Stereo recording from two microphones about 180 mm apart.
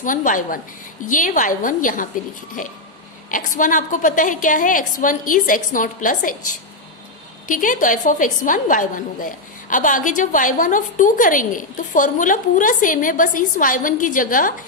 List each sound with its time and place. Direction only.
0.0 s a woman's voice: 45° left (ahead or behind)
7.4 s a woman's voice: 45° left (ahead or behind)